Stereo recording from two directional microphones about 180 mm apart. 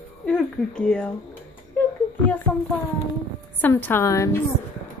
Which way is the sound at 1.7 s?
10° left (ahead or behind).